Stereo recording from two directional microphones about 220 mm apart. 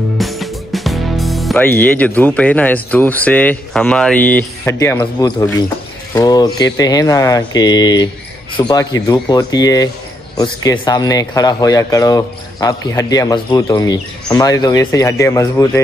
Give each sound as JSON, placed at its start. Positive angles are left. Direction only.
{"t": 0.2, "sound": "speech", "side_deg": 0}